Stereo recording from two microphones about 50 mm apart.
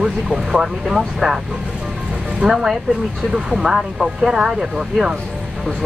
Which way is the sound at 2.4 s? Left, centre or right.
Centre.